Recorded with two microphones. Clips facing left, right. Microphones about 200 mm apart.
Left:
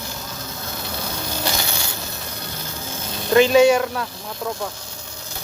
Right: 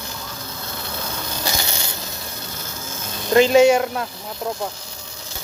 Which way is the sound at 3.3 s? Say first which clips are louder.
Even; 30° right (ahead or behind).